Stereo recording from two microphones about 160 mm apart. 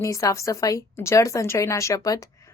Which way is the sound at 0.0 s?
20° left (ahead or behind).